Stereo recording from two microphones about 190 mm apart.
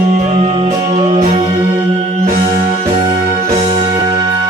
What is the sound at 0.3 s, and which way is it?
Music, 35° right (ahead or behind).